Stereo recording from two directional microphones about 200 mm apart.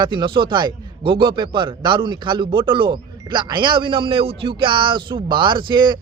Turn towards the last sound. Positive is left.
turn(degrees=-25)  # may be behind; listen again after turning